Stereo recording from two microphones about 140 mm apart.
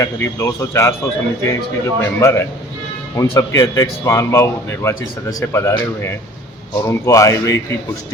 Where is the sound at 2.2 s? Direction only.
20° left (ahead or behind).